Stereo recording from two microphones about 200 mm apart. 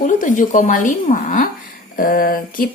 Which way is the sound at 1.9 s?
45° left (ahead or behind).